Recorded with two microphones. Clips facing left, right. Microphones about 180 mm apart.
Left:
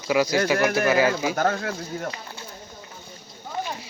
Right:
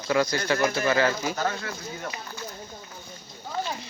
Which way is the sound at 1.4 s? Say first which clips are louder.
Left 5 dB; 50° left (ahead or behind).